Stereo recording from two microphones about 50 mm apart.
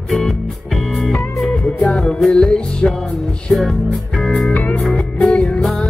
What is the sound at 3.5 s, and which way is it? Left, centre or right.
Music, centre.